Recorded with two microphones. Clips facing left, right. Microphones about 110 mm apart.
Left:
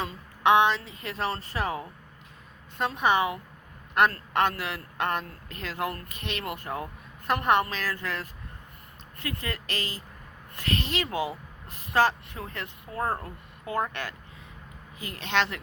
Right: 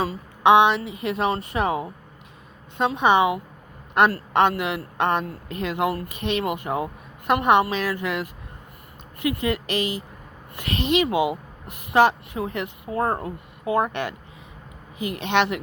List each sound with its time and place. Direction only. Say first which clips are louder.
0.4 s a man's voice: right 5 dB; 20° right (ahead or behind)